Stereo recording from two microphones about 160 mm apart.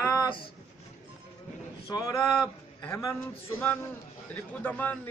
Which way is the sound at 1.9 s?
20° left (ahead or behind).